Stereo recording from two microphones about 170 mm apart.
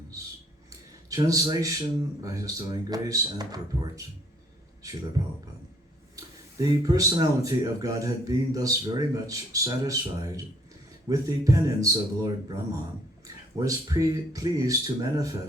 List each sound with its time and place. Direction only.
0.7 s a sound: 20° right (ahead or behind)
2.2 s speech: 20° right (ahead or behind)
6.1 s speech: 20° right (ahead or behind)